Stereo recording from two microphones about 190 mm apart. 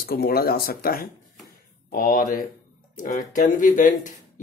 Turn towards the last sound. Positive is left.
turn(degrees=40)  # may be behind; listen again after turning